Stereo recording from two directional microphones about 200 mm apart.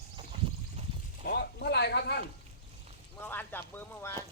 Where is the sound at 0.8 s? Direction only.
30° right (ahead or behind).